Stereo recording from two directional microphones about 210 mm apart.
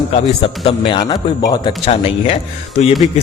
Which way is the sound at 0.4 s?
25° left (ahead or behind).